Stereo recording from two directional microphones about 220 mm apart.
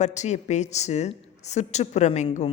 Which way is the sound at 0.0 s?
30° left (ahead or behind).